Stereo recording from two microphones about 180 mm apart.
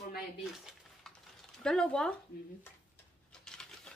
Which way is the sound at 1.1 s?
5° left (ahead or behind).